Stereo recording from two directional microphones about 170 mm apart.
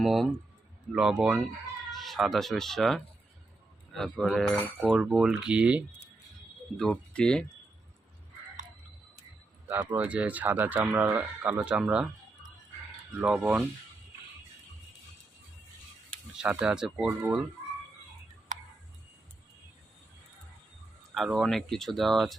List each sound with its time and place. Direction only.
0.0 s cutlery: centre (ahead or behind)
1.9 s speech: centre (ahead or behind)
3.9 s cutlery: centre (ahead or behind)
6.7 s cutlery: 5° left (ahead or behind)
9.9 s speech: 10° right (ahead or behind)
13.2 s cutlery: 5° right (ahead or behind)
16.4 s cutlery: 5° right (ahead or behind)
17.1 s speech: 10° right (ahead or behind)
18.5 s tick-tock: 50° right (ahead or behind)
21.1 s cutlery: centre (ahead or behind)